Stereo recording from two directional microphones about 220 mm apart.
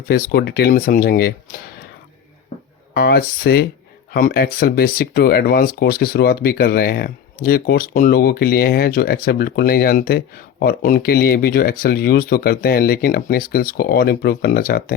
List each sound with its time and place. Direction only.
0.1 s speech: 45° left (ahead or behind)
2.5 s music: 30° left (ahead or behind)
2.9 s speech: 45° left (ahead or behind)